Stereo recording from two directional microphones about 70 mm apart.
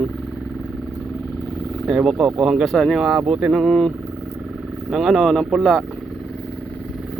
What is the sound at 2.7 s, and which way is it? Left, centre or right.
Speech, centre.